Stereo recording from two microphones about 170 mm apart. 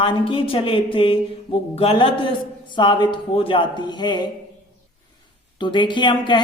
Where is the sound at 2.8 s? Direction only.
25° left (ahead or behind).